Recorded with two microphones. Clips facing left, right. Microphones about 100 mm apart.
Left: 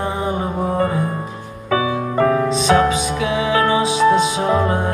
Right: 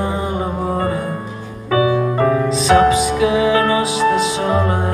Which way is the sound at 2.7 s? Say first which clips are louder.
Right 5 dB; 30° right (ahead or behind).